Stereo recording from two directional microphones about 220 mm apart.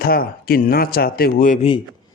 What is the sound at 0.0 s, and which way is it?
A man's voice, 40° left (ahead or behind).